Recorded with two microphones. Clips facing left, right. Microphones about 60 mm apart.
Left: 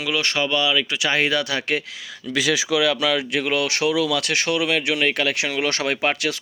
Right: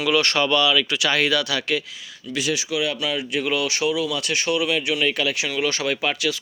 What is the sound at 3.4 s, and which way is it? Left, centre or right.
Speech, left.